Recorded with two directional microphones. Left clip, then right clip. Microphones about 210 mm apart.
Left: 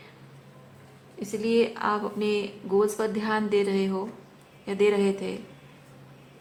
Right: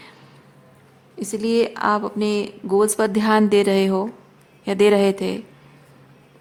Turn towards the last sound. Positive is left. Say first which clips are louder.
# right 7 dB
turn(degrees=-55)  # may be behind; listen again after turning